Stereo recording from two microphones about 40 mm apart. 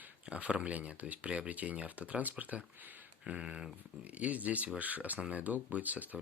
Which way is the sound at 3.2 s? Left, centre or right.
Centre.